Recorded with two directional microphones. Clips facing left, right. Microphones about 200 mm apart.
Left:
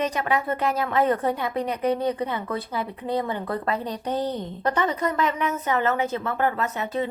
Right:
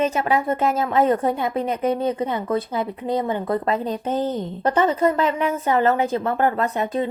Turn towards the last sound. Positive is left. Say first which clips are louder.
# right 4 dB
turn(degrees=-45)  # may be behind; listen again after turning